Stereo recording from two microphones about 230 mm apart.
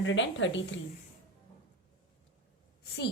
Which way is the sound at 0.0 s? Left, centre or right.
Left.